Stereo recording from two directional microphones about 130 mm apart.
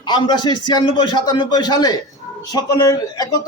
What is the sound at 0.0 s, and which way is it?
A man's voice, 35° left (ahead or behind).